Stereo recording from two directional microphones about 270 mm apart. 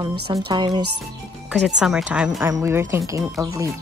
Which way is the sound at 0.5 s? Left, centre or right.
Centre.